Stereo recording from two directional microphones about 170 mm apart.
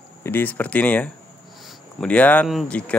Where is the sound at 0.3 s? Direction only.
10° left (ahead or behind).